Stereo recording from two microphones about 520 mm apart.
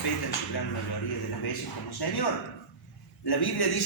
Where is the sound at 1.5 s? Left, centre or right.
Left.